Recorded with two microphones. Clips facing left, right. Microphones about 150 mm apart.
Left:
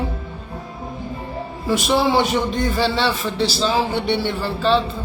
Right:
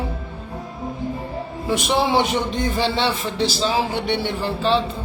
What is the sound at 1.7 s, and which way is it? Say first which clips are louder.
A man's voice: left 2 dB; 20° right (ahead or behind).